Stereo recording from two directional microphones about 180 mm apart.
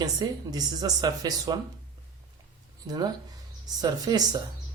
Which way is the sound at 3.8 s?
20° right (ahead or behind).